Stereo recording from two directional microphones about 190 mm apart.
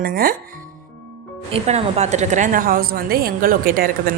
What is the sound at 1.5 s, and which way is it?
A woman's voice, 35° right (ahead or behind).